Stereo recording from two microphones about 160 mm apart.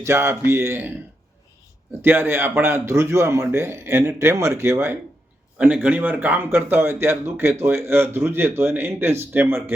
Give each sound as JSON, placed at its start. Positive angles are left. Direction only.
{"t": 0.0, "sound": "speech", "side_deg": -15}
{"t": 2.0, "sound": "speech", "side_deg": -10}